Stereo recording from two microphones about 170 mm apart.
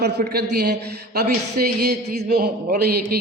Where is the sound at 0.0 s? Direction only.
70° right (ahead or behind).